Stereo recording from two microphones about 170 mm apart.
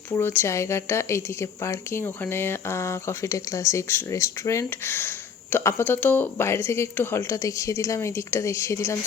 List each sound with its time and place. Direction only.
0.1 s speech: 15° left (ahead or behind)